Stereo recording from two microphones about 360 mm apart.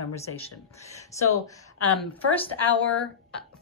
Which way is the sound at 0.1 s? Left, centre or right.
Centre.